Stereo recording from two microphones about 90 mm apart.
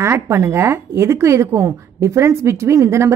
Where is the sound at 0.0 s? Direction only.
30° right (ahead or behind).